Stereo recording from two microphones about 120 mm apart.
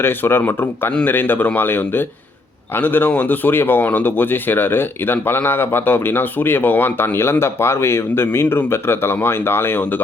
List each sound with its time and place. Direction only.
0.0 s speech: 20° left (ahead or behind)